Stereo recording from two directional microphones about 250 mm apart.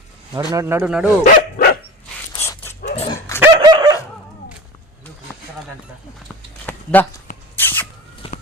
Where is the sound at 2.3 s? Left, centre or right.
Centre.